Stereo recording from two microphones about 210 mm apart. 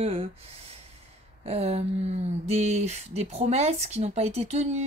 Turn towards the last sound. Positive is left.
turn(degrees=-30)  # may be behind; listen again after turning